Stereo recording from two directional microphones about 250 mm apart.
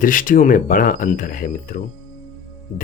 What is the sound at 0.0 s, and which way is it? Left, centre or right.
Speech, left.